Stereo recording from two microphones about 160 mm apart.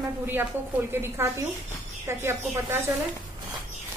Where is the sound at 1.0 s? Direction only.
15° right (ahead or behind).